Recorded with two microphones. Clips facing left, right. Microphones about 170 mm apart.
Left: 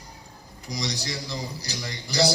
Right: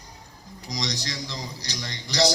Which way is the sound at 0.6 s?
10° left (ahead or behind).